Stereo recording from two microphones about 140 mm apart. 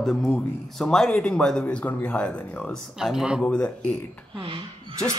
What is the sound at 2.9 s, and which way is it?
Speech, 5° right (ahead or behind).